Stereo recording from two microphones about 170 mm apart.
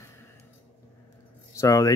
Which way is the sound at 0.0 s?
15° left (ahead or behind).